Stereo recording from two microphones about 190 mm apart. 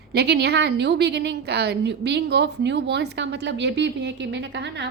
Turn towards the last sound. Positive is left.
turn(degrees=-65)  # may be behind; listen again after turning